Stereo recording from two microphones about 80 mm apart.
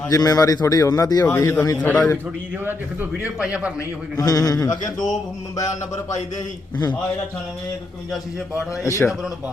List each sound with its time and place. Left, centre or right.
0.1 s speech: left
1.2 s a man's voice: left
1.8 s a man's voice: centre
3.1 s a man's voice: centre
3.8 s speech: left
6.1 s speech: left
8.8 s a man's voice: left